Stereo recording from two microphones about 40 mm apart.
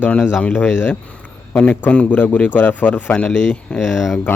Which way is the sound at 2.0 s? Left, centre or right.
Left.